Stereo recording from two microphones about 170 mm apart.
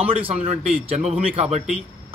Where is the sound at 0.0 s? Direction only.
35° right (ahead or behind).